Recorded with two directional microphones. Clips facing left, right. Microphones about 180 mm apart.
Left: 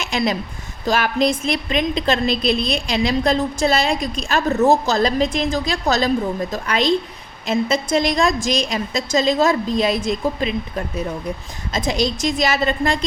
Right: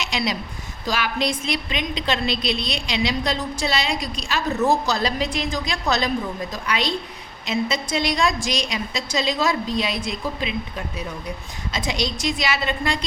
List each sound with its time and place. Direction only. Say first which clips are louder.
0.0 s a woman's voice: left 4 dB; 50° left (ahead or behind)